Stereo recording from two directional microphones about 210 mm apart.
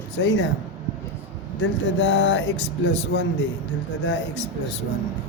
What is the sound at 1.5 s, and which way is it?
A man's voice, 60° left (ahead or behind).